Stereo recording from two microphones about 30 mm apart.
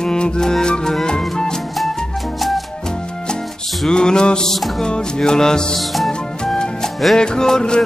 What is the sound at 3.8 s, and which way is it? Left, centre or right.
Music, left.